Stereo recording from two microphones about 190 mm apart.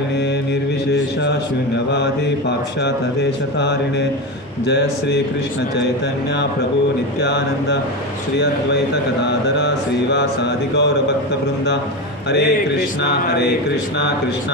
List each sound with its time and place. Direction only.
3.5 s mantra: 65° left (ahead or behind)
7.2 s mantra: 65° left (ahead or behind)
10.1 s mantra: 65° left (ahead or behind)
12.3 s mantra: 65° left (ahead or behind)